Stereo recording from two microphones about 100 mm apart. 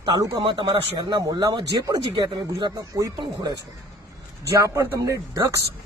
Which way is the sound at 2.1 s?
50° right (ahead or behind).